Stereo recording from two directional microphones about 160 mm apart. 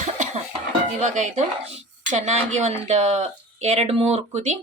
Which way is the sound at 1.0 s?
50° right (ahead or behind).